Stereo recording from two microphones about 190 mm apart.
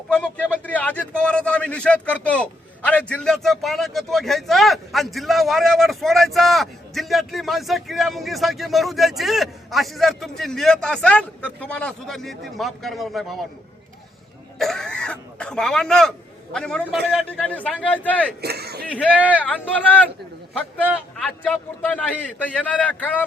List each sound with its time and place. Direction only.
0.1 s a man's voice: 5° left (ahead or behind)
14.6 s a man's voice: centre (ahead or behind)
18.4 s speech: 55° right (ahead or behind)
19.1 s a man's voice: 5° right (ahead or behind)
21.2 s a man's voice: 10° left (ahead or behind)